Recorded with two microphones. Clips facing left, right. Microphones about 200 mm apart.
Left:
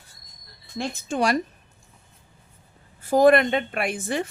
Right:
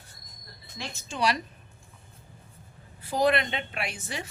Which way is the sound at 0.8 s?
55° left (ahead or behind).